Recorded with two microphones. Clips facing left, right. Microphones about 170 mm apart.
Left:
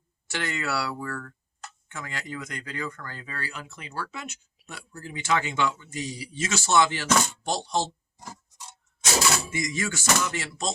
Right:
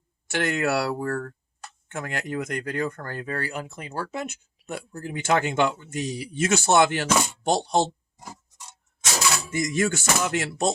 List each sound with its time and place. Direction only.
0.3 s speech: 55° right (ahead or behind)
9.5 s speech: 50° right (ahead or behind)